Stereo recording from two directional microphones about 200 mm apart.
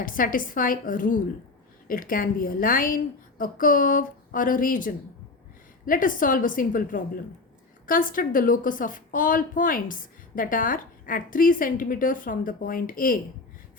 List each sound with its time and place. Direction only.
0.0 s a woman's voice: 45° left (ahead or behind)